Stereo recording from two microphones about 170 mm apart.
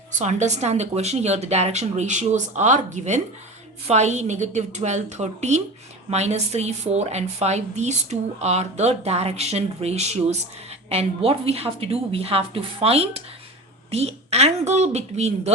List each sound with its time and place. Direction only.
0.1 s speech: 45° right (ahead or behind)